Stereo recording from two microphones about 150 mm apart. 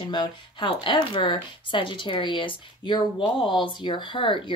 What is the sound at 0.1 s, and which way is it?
Speech, 30° left (ahead or behind).